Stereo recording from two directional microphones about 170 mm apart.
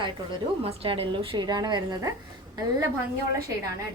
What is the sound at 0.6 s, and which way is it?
A woman's voice, 35° right (ahead or behind).